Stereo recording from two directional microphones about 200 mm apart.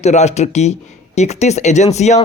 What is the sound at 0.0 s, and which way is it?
Speech, 35° left (ahead or behind).